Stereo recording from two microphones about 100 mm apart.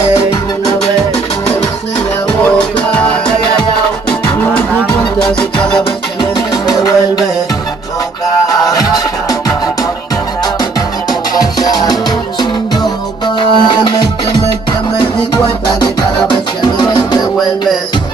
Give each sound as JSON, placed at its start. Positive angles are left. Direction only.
{"t": 2.4, "sound": "music", "side_deg": 15}
{"t": 5.2, "sound": "music", "side_deg": 10}
{"t": 6.7, "sound": "music", "side_deg": 40}
{"t": 8.5, "sound": "music", "side_deg": 35}
{"t": 11.6, "sound": "music", "side_deg": 40}
{"t": 13.4, "sound": "music", "side_deg": 55}
{"t": 15.8, "sound": "music", "side_deg": 45}